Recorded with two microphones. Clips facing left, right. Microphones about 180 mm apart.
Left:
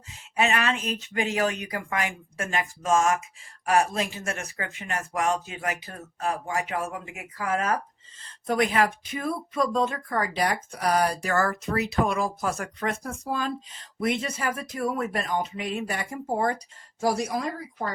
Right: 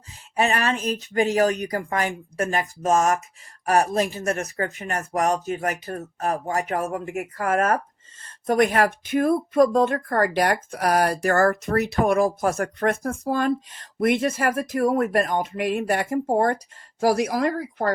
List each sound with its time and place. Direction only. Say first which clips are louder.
0.1 s speech: right 2 dB; 35° right (ahead or behind); by 17.9 s 70° right (ahead or behind)